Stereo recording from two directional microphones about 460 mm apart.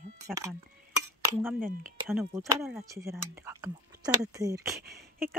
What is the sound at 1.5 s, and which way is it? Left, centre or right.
Speech, centre.